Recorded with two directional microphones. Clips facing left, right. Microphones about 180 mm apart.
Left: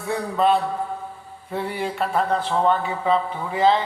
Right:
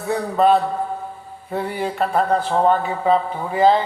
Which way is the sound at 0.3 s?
40° right (ahead or behind).